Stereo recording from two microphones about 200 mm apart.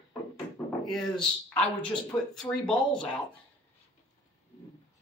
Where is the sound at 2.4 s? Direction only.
5° left (ahead or behind).